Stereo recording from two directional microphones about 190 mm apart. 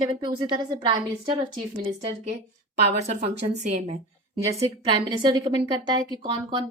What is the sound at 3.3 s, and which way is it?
Speech, 40° right (ahead or behind).